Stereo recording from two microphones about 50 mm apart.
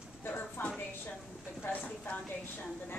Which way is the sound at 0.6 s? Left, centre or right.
Left.